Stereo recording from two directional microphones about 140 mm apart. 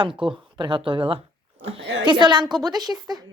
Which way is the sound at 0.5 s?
35° right (ahead or behind).